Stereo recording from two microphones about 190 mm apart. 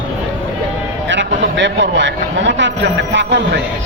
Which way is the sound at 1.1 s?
70° right (ahead or behind).